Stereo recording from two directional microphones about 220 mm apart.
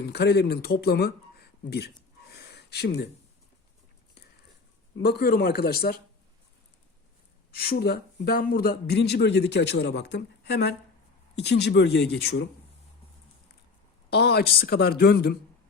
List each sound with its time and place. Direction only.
0.0 s speech: 50° left (ahead or behind)
4.9 s speech: 50° left (ahead or behind)
7.5 s speech: 45° left (ahead or behind)
14.1 s speech: 50° left (ahead or behind)